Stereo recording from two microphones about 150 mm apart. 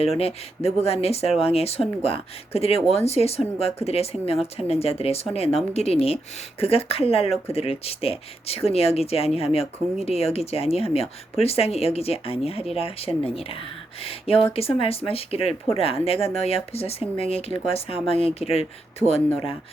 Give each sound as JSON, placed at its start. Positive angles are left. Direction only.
{"t": 0.2, "sound": "speech", "side_deg": 45}